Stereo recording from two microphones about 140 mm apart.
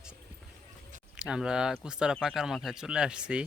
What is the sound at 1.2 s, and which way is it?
Speech, 5° right (ahead or behind).